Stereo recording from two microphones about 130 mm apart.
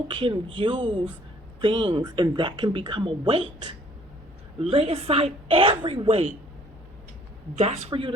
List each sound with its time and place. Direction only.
0.1 s a woman's voice: 40° right (ahead or behind)
7.6 s a woman's voice: 50° right (ahead or behind)